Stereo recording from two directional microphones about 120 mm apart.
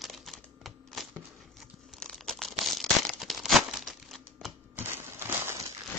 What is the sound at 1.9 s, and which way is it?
Crumpling, 5° left (ahead or behind).